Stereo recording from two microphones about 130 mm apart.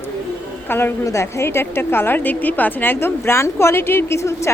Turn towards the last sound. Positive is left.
turn(degrees=20)  # may be behind; listen again after turning